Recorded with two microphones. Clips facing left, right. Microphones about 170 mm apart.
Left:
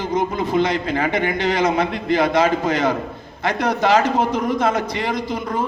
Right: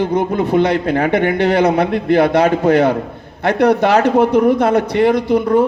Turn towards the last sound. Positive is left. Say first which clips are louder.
# right 10 dB
turn(degrees=-60)  # may be behind; listen again after turning